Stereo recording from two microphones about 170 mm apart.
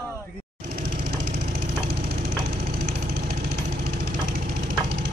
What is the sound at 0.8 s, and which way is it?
Engine, 65° right (ahead or behind).